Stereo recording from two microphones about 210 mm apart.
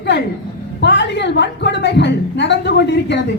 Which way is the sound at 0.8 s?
55° left (ahead or behind).